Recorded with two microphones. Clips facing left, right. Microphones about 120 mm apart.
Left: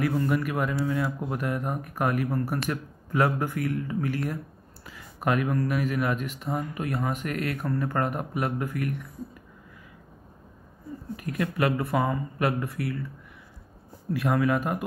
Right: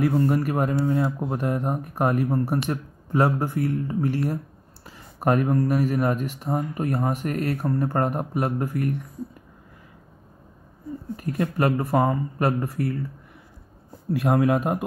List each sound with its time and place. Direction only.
0.0 s speech: 35° right (ahead or behind)
11.1 s speech: 35° right (ahead or behind)
14.2 s speech: 40° right (ahead or behind)